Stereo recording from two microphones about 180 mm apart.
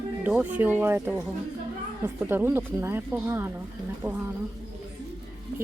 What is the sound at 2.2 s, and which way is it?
Speech, 10° right (ahead or behind).